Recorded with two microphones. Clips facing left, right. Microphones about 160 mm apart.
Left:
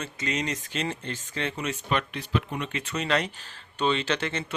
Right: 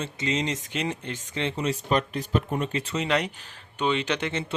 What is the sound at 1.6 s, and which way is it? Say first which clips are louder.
Speech: right 5 dB; 35° right (ahead or behind).